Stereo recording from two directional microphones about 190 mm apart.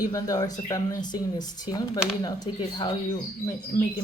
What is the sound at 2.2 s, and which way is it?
Speech, 20° left (ahead or behind).